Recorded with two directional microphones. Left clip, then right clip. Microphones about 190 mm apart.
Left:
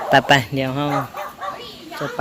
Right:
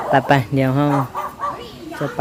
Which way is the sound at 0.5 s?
20° right (ahead or behind).